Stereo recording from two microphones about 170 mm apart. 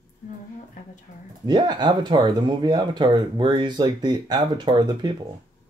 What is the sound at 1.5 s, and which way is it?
Speech, 25° right (ahead or behind).